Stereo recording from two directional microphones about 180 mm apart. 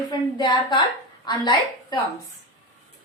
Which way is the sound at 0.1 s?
25° left (ahead or behind).